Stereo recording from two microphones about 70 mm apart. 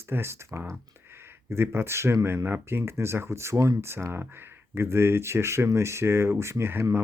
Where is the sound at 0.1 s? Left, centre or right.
Right.